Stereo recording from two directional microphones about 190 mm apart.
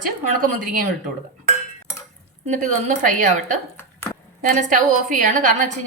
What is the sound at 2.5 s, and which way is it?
A woman's voice, 40° right (ahead or behind).